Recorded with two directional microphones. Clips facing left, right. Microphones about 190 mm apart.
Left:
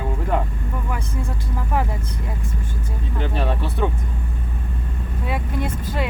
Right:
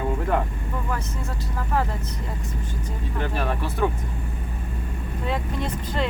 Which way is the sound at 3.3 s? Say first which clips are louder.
Left 3 dB; 25° left (ahead or behind).